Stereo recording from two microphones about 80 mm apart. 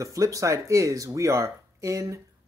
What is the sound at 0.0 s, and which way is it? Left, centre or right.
Speech, right.